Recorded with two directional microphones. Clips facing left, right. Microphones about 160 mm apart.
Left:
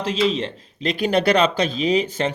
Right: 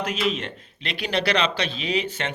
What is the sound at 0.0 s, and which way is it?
Speech, 30° left (ahead or behind).